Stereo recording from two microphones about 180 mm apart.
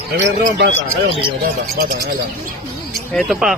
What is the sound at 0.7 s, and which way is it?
Speech, 30° left (ahead or behind).